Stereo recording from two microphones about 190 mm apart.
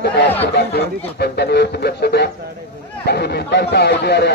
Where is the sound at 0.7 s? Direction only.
60° left (ahead or behind).